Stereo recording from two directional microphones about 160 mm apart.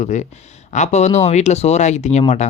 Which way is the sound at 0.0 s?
50° left (ahead or behind).